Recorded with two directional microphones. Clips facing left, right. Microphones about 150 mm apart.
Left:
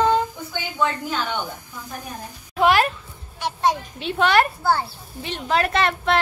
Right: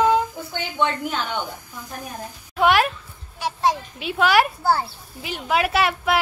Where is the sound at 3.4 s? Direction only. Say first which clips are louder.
Even; 5° right (ahead or behind).